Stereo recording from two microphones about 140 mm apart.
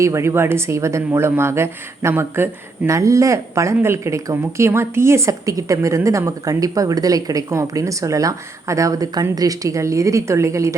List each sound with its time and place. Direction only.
0.0 s speech: 20° right (ahead or behind)